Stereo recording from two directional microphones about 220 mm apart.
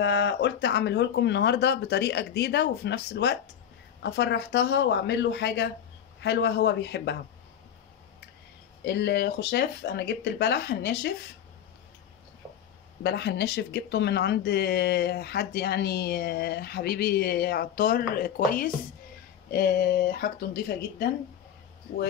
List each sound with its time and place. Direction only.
0.0 s speech: 50° left (ahead or behind)
8.8 s speech: 50° left (ahead or behind)
13.0 s speech: 50° left (ahead or behind)